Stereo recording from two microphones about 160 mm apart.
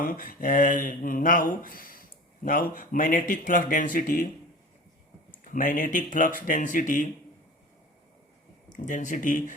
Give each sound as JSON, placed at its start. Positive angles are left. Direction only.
{"t": 0.0, "sound": "speech", "side_deg": 60}
{"t": 5.5, "sound": "speech", "side_deg": 55}
{"t": 8.7, "sound": "speech", "side_deg": 55}